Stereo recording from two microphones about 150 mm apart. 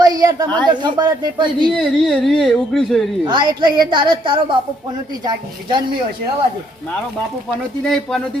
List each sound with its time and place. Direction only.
0.0 s speech: 25° right (ahead or behind)
0.4 s speech: 10° left (ahead or behind)
0.7 s speech: 30° right (ahead or behind)
1.7 s speech: 5° left (ahead or behind)
3.2 s a woman's voice: 30° right (ahead or behind)
7.9 s speech: 5° left (ahead or behind)